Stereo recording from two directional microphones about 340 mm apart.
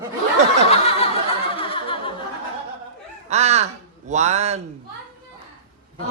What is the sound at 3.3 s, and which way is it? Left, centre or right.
Speech, centre.